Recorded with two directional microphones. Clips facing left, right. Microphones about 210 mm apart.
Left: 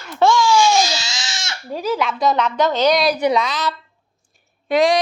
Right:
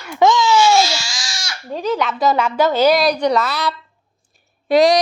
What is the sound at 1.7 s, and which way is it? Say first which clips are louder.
A woman's voice: right 1 dB; 5° left (ahead or behind).